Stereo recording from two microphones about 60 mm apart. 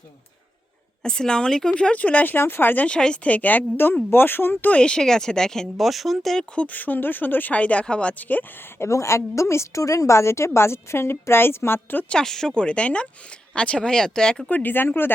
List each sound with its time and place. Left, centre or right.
1.0 s speech: centre; by 2.8 s left
2.8 s speech: centre; by 4.7 s left
4.7 s speech: centre
6.6 s speech: left
8.8 s a woman's voice: left
12.0 s speech: centre
14.5 s speech: left